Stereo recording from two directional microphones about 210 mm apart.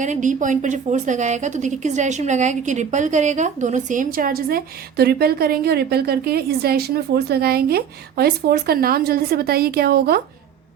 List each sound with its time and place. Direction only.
0.0 s a woman's voice: 35° right (ahead or behind)